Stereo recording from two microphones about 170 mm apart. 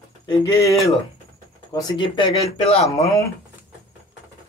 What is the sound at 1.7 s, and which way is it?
Speech, 25° left (ahead or behind).